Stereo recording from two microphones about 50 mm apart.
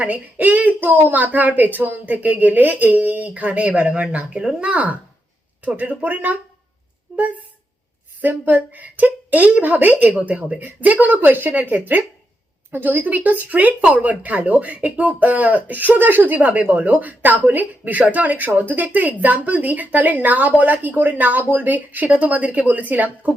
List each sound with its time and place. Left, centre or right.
0.0 s speech: right
8.2 s speech: right